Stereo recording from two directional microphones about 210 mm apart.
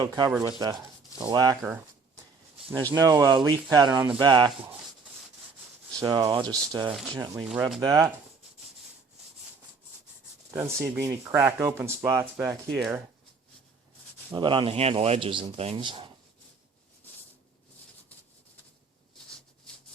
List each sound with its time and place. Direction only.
0.0 s speech: 15° right (ahead or behind)
2.9 s speech: 15° right (ahead or behind)
6.0 s speech: 20° right (ahead or behind)
10.5 s speech: 10° right (ahead or behind)
14.3 s speech: 20° right (ahead or behind)